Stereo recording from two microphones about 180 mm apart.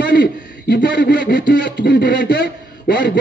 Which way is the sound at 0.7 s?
75° left (ahead or behind).